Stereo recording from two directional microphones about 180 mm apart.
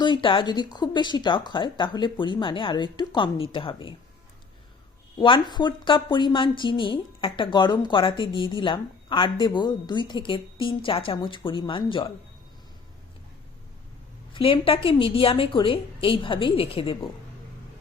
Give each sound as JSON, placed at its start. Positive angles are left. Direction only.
{"t": 0.0, "sound": "a woman's voice", "side_deg": 25}
{"t": 5.2, "sound": "a woman's voice", "side_deg": 25}
{"t": 14.3, "sound": "a woman's voice", "side_deg": 30}